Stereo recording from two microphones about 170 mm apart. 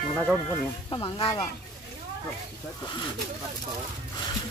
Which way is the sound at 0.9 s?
30° left (ahead or behind).